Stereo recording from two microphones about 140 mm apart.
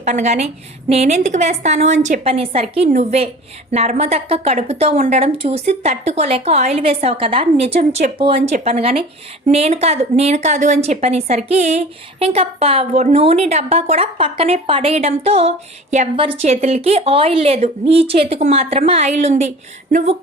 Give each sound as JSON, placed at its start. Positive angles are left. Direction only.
{"t": 0.0, "sound": "a woman's voice", "side_deg": -55}
{"t": 2.2, "sound": "a woman's voice", "side_deg": -45}
{"t": 16.1, "sound": "a woman's voice", "side_deg": -40}